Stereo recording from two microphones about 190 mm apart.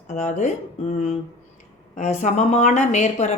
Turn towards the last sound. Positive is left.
turn(degrees=40)  # may be behind; listen again after turning